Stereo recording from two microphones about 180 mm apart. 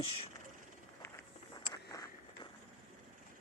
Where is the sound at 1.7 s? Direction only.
20° left (ahead or behind).